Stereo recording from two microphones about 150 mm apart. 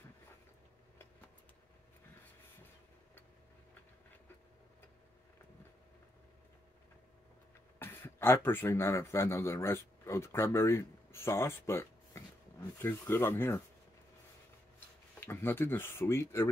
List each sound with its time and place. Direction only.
7.8 s speech: 15° left (ahead or behind)
15.1 s speech: 15° left (ahead or behind)